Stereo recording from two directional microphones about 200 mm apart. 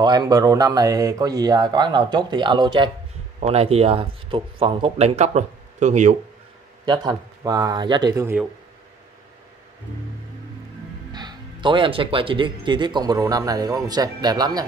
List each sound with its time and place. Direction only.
0.0 s speech: 20° right (ahead or behind); by 6.1 s 35° right (ahead or behind)
6.9 s speech: 20° right (ahead or behind)
11.1 s speech: 20° right (ahead or behind)